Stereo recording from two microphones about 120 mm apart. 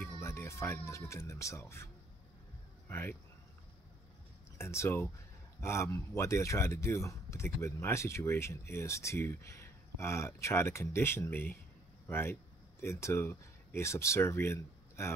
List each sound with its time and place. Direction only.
0.2 s speech: 20° left (ahead or behind)
2.9 s speech: 15° left (ahead or behind)
4.6 s speech: 20° left (ahead or behind)